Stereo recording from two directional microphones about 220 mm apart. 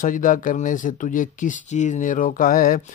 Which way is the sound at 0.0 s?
40° left (ahead or behind).